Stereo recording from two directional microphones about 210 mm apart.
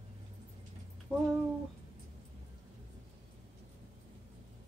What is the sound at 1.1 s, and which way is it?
Speech, 5° left (ahead or behind).